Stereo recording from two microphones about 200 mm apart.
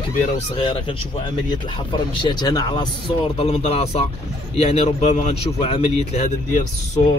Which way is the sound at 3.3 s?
30° left (ahead or behind).